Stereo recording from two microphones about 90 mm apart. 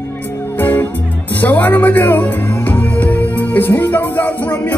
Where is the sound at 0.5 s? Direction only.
20° left (ahead or behind).